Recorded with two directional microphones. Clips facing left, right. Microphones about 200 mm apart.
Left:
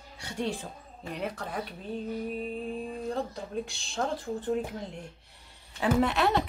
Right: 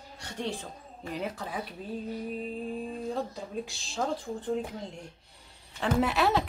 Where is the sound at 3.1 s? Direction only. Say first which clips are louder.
Left 1 dB; centre (ahead or behind).